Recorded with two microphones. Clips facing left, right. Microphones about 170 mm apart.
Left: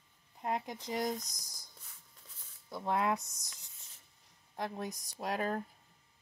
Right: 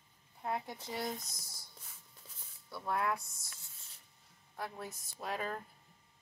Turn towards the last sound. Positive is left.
turn(degrees=40)  # may be behind; listen again after turning